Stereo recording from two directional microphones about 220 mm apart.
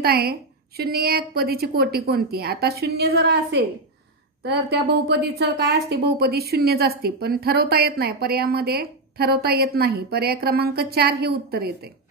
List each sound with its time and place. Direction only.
0.0 s a woman's voice: 45° right (ahead or behind)
4.4 s a woman's voice: 50° right (ahead or behind)